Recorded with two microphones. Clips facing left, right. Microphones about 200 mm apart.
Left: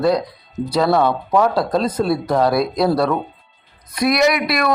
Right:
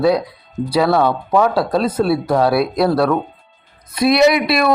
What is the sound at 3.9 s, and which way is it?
Speech, 25° right (ahead or behind).